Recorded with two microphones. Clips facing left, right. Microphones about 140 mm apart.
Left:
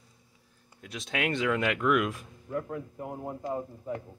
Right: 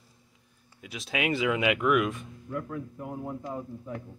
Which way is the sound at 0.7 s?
Centre (ahead or behind).